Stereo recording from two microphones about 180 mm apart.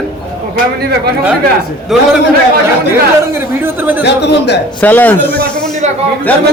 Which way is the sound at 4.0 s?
70° left (ahead or behind).